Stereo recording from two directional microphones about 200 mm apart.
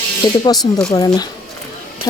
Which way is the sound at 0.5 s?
Centre (ahead or behind).